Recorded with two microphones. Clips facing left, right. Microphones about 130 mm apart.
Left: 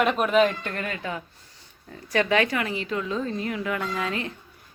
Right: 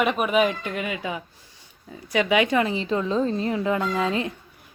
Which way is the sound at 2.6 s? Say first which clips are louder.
Right 5 dB; 25° right (ahead or behind).